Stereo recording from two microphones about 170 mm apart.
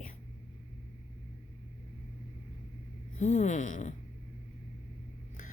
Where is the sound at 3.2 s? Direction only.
40° left (ahead or behind).